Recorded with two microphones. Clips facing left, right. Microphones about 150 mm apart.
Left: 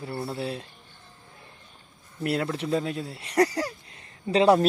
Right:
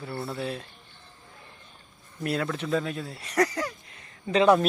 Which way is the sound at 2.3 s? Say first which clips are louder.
Left 1 dB; 25° left (ahead or behind).